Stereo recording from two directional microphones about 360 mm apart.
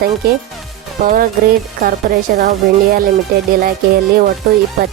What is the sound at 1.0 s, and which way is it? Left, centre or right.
Speech, right.